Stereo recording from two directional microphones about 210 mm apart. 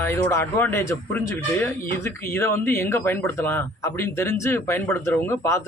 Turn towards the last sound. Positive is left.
turn(degrees=15)  # may be behind; listen again after turning